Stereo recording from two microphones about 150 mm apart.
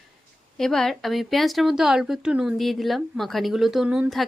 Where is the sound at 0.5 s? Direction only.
5° left (ahead or behind).